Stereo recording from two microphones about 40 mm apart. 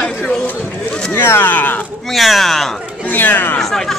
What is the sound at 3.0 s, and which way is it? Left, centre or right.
Speech, left.